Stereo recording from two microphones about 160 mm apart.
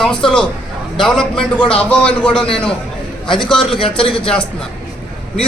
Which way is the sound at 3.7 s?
35° left (ahead or behind).